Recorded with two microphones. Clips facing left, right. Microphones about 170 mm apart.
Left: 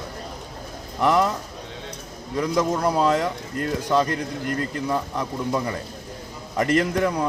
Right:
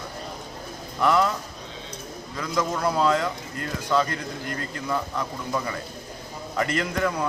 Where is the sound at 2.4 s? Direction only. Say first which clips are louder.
Left 5 dB; 40° left (ahead or behind).